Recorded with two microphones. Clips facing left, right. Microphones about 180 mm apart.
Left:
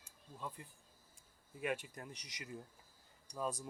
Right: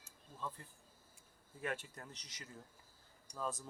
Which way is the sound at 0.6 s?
15° left (ahead or behind).